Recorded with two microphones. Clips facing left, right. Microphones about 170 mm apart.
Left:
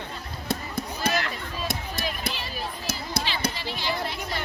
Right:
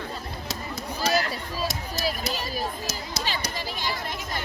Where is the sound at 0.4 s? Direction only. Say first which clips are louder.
Left 7 dB; 55° left (ahead or behind).